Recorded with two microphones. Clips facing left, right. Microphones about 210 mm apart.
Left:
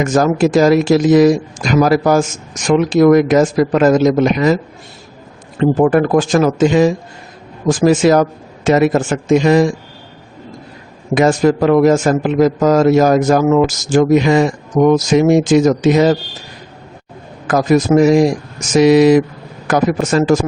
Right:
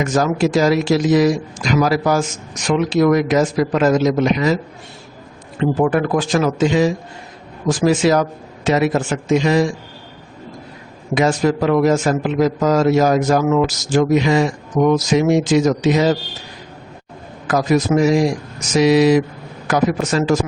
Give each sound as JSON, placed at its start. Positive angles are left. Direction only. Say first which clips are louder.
{"t": 0.0, "sound": "speech", "louder": "left 4 dB", "side_deg": 50}
{"t": 5.5, "sound": "speech", "louder": "left 5 dB", "side_deg": 45}
{"t": 11.1, "sound": "speech", "louder": "left 4 dB", "side_deg": 50}
{"t": 17.4, "sound": "speech", "louder": "left 4 dB", "side_deg": 50}